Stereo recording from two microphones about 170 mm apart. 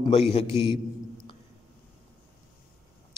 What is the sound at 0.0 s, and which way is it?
Speech, 35° left (ahead or behind).